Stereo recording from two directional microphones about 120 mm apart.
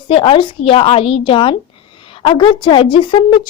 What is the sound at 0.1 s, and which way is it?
A woman's voice, 45° left (ahead or behind).